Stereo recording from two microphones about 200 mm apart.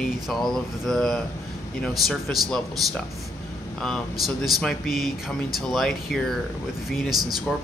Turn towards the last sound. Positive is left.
turn(degrees=0)  # may be behind; listen again after turning